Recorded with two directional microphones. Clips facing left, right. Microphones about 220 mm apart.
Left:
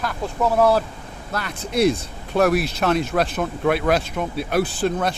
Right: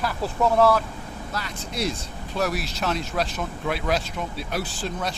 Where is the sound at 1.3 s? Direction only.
60° left (ahead or behind).